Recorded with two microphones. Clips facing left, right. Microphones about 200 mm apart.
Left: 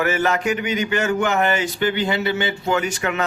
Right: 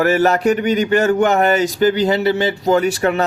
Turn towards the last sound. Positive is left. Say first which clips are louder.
# right 7 dB
turn(degrees=-35)  # may be behind; listen again after turning